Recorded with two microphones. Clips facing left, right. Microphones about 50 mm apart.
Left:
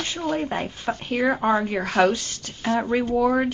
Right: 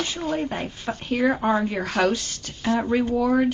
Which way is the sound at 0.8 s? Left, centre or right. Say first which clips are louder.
Left 3 dB; left.